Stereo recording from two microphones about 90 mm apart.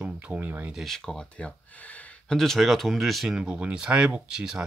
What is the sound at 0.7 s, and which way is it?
Speech, centre (ahead or behind).